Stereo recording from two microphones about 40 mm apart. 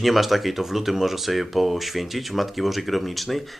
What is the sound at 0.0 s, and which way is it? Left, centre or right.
Speech, centre.